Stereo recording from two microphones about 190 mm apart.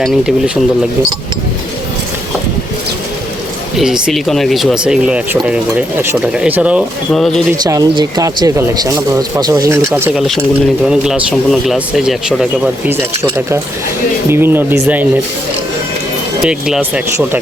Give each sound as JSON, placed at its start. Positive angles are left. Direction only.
{"t": 0.0, "sound": "speech", "side_deg": -5}
{"t": 3.8, "sound": "speech", "side_deg": -5}
{"t": 7.6, "sound": "speech", "side_deg": -20}
{"t": 10.2, "sound": "speech", "side_deg": 0}
{"t": 16.4, "sound": "speech", "side_deg": -5}